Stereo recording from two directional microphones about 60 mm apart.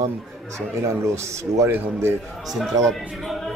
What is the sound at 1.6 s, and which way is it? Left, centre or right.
Speech, right.